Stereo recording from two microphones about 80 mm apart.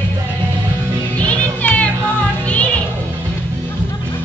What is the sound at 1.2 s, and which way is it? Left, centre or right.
Music, centre.